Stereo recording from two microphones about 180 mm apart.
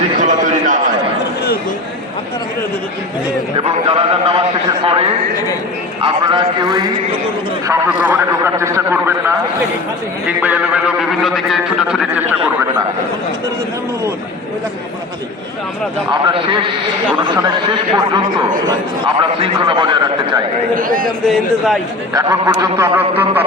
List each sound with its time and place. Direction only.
0.2 s a sound: 45° right (ahead or behind)
3.6 s a sound: 30° right (ahead or behind)
6.0 s a man's voice: 30° right (ahead or behind)
7.7 s a man's voice: 15° right (ahead or behind)
17.2 s a man's voice: 25° right (ahead or behind)
20.7 s a man's voice: 50° right (ahead or behind)
22.1 s a man's voice: 20° right (ahead or behind)
22.8 s a man's voice: 10° right (ahead or behind)